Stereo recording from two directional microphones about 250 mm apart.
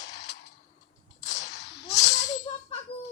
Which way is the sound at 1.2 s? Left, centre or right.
Left.